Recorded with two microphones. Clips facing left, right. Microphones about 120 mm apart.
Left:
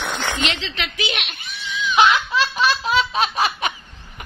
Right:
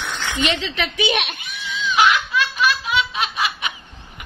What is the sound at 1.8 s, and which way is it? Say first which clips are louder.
Snicker: left 1 dB; 25° left (ahead or behind).